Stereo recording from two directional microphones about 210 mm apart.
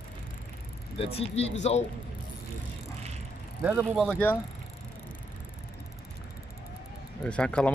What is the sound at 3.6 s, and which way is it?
Speech, 5° right (ahead or behind).